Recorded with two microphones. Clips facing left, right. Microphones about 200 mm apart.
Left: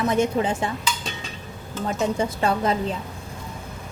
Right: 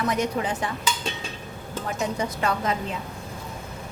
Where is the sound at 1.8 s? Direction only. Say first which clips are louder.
Left 4 dB; 30° left (ahead or behind).